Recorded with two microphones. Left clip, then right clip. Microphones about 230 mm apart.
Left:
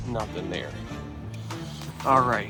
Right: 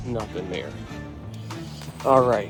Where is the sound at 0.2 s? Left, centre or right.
Centre.